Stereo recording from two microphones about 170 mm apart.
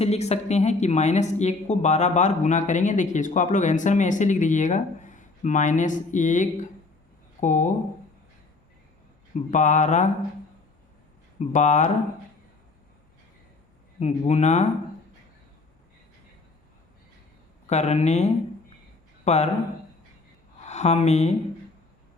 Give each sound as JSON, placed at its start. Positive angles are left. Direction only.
{"t": 0.0, "sound": "speech", "side_deg": 40}
{"t": 9.3, "sound": "speech", "side_deg": 45}
{"t": 11.3, "sound": "speech", "side_deg": 45}
{"t": 14.0, "sound": "speech", "side_deg": 40}
{"t": 17.7, "sound": "speech", "side_deg": 40}
{"t": 20.7, "sound": "speech", "side_deg": 40}